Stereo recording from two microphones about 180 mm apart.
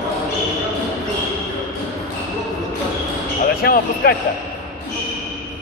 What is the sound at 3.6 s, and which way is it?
Speech, 60° left (ahead or behind).